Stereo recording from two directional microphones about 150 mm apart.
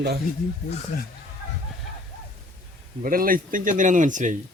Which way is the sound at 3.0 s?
70° right (ahead or behind).